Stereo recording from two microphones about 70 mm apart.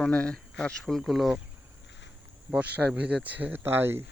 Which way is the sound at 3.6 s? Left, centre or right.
Right.